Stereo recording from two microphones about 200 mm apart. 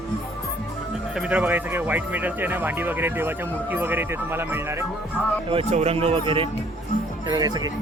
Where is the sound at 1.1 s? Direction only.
5° right (ahead or behind).